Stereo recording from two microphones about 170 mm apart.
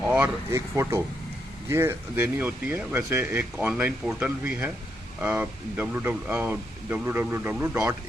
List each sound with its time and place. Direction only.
0.0 s speech: 10° right (ahead or behind)